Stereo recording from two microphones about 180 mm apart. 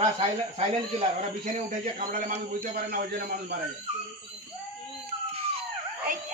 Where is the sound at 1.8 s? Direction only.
50° right (ahead or behind).